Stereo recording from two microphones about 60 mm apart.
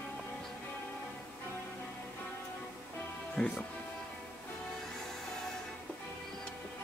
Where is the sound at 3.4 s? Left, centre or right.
Centre.